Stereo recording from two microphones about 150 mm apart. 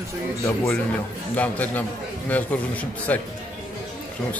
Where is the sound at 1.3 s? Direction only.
10° left (ahead or behind).